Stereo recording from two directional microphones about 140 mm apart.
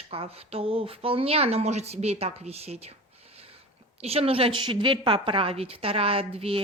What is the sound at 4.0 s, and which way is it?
A woman's voice, 45° right (ahead or behind).